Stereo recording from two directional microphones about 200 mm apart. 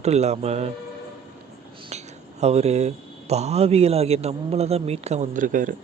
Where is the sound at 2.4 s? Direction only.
30° right (ahead or behind).